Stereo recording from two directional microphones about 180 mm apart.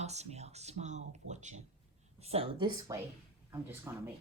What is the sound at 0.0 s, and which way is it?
Speech, 40° right (ahead or behind).